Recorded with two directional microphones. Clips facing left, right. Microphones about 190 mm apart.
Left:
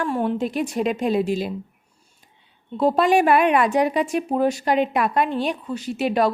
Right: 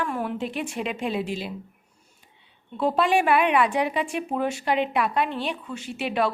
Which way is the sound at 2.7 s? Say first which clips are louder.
Left 4 dB; 40° left (ahead or behind).